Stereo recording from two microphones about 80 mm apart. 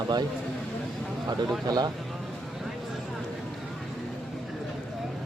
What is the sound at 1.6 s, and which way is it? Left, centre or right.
Speech, right.